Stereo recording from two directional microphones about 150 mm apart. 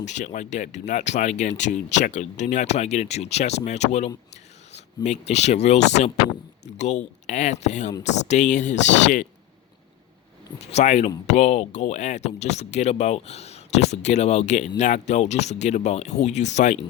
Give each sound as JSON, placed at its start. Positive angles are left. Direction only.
{"t": 0.0, "sound": "speech", "side_deg": 50}
{"t": 10.7, "sound": "speech", "side_deg": 50}